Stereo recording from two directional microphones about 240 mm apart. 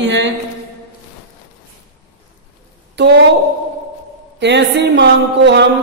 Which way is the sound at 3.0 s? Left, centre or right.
Right.